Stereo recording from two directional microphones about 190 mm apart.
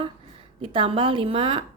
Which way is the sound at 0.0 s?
30° right (ahead or behind).